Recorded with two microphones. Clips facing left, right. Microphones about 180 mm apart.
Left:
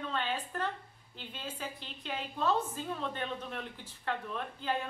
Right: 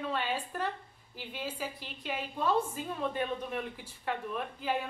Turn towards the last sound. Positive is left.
turn(degrees=-10)  # may be behind; listen again after turning